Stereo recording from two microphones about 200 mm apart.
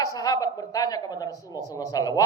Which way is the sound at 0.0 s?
20° left (ahead or behind).